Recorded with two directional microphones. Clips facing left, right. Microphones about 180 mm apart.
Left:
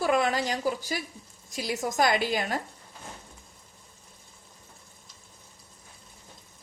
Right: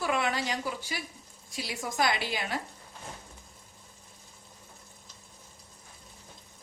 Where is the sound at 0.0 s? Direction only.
40° left (ahead or behind).